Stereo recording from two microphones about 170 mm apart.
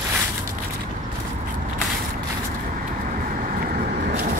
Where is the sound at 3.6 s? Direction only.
55° right (ahead or behind).